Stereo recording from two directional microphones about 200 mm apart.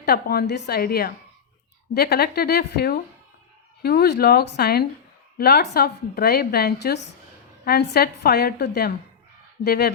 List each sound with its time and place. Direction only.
0.0 s a woman's voice: 50° left (ahead or behind)